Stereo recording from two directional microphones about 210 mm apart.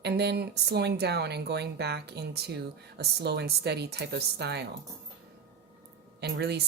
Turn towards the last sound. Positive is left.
turn(degrees=-50)  # may be behind; listen again after turning